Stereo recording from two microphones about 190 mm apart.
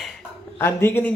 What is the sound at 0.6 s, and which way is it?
Speech, 10° left (ahead or behind).